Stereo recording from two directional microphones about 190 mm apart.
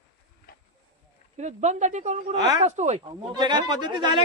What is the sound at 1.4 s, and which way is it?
Speech, 35° right (ahead or behind).